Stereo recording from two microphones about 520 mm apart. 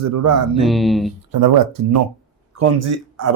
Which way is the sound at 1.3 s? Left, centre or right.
Right.